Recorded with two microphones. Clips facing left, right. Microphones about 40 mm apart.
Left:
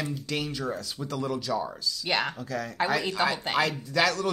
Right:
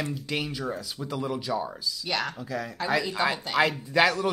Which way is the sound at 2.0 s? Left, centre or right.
Left.